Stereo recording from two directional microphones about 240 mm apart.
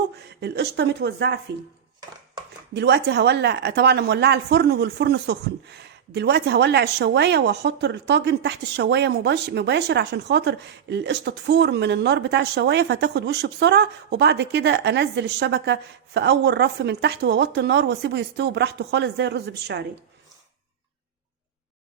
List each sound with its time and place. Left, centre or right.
0.4 s speech: right
2.7 s speech: right